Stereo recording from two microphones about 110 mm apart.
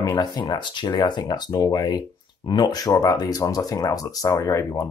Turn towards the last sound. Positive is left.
turn(degrees=30)  # may be behind; listen again after turning